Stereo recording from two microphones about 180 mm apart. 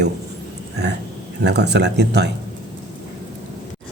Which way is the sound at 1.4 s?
70° right (ahead or behind).